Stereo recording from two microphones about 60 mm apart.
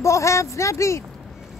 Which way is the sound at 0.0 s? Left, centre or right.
Left.